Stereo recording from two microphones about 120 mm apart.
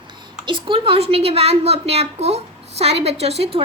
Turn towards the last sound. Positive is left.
turn(degrees=-60)  # may be behind; listen again after turning